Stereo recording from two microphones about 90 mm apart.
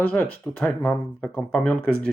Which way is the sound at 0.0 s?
15° left (ahead or behind).